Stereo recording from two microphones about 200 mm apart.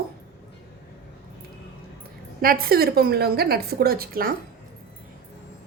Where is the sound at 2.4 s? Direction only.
45° right (ahead or behind).